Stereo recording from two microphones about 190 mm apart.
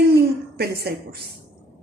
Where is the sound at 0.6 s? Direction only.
55° right (ahead or behind).